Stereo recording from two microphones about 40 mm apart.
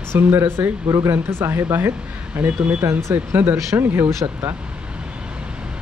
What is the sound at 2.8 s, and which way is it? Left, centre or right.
Speech, right.